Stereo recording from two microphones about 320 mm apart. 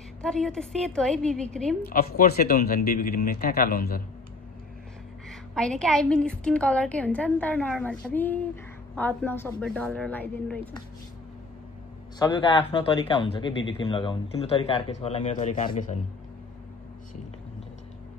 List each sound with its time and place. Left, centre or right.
0.2 s a woman's voice: centre
1.9 s speech: left
5.3 s a woman's voice: centre
12.2 s speech: centre